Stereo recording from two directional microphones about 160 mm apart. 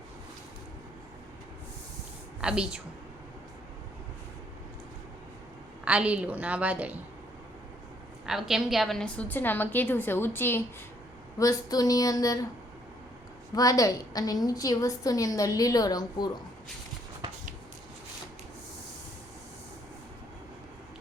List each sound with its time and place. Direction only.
2.4 s speech: 5° right (ahead or behind)
5.8 s a woman's voice: 5° right (ahead or behind)
8.3 s a woman's voice: centre (ahead or behind); by 12.5 s 20° left (ahead or behind)
13.6 s a woman's voice: 20° left (ahead or behind)